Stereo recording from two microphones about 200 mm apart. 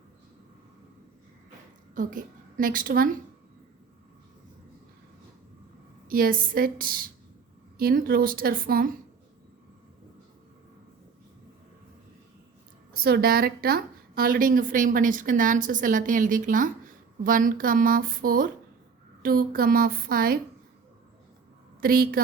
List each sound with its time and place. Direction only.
2.0 s a woman's voice: 40° right (ahead or behind)
6.1 s a woman's voice: 45° right (ahead or behind)
13.0 s a woman's voice: 50° right (ahead or behind)
21.8 s a woman's voice: 45° right (ahead or behind)